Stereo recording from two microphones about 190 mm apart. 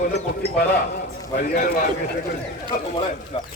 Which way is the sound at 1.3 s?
50° left (ahead or behind).